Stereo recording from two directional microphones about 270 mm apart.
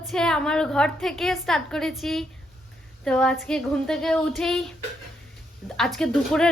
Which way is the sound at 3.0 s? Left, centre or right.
Centre.